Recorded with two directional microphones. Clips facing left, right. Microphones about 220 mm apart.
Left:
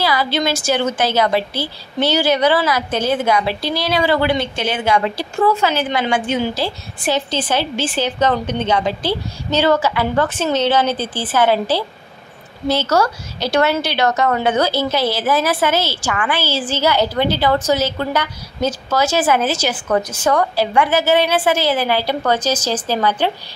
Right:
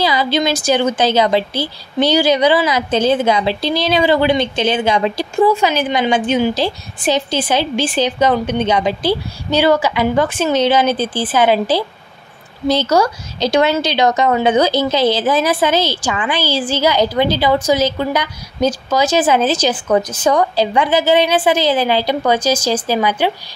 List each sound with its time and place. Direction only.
0.0 s a woman's voice: 20° right (ahead or behind)